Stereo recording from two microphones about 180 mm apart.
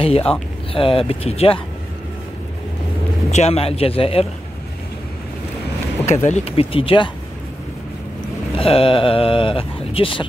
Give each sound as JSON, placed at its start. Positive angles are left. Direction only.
{"t": 0.0, "sound": "a man's voice", "side_deg": 30}
{"t": 3.3, "sound": "a man's voice", "side_deg": 35}
{"t": 6.2, "sound": "a man's voice", "side_deg": 35}
{"t": 8.5, "sound": "speech", "side_deg": 30}